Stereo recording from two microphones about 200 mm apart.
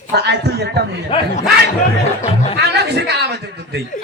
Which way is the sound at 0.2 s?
55° right (ahead or behind).